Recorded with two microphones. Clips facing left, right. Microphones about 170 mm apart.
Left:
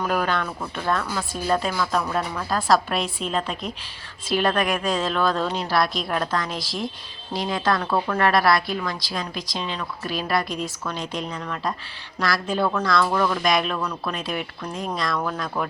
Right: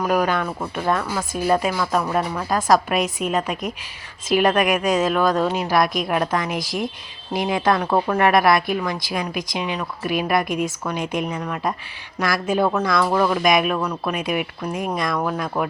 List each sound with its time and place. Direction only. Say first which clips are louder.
0.0 s speech: right 4 dB; 10° right (ahead or behind)